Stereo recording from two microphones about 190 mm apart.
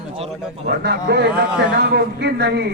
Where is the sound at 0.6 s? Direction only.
60° right (ahead or behind).